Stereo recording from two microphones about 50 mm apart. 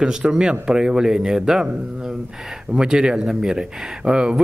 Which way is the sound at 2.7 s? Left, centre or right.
Centre.